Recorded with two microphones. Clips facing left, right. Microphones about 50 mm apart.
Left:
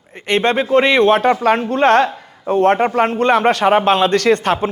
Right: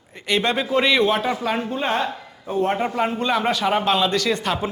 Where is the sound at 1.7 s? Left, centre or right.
Left.